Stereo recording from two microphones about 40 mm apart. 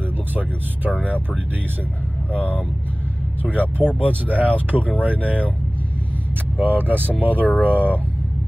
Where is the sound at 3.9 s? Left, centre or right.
Left.